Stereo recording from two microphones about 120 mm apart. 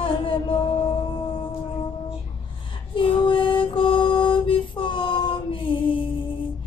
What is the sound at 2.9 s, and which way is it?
Music, 45° left (ahead or behind).